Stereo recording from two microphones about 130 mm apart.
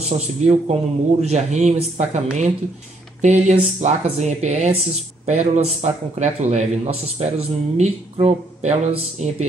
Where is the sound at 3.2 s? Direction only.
60° right (ahead or behind).